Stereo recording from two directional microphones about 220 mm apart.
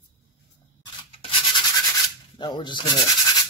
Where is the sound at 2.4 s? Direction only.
20° left (ahead or behind).